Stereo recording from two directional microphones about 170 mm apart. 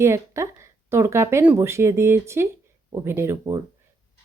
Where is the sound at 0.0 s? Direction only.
15° right (ahead or behind).